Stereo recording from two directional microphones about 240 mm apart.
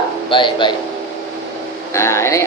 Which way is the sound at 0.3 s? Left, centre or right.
Centre.